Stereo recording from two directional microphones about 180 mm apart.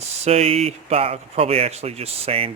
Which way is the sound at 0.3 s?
35° right (ahead or behind).